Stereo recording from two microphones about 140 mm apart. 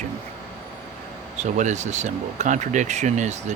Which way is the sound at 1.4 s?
55° right (ahead or behind).